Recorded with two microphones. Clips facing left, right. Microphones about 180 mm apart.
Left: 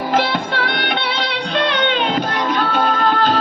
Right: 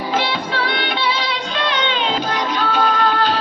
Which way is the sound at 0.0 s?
55° left (ahead or behind).